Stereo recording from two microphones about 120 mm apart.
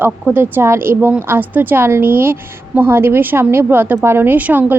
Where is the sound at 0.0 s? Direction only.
15° right (ahead or behind).